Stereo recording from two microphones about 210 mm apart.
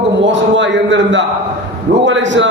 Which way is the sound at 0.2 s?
60° right (ahead or behind).